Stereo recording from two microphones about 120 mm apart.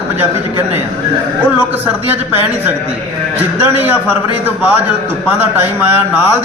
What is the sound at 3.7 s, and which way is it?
Speech, 15° right (ahead or behind).